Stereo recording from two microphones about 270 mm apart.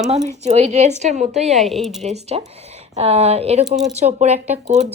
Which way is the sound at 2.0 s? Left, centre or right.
Right.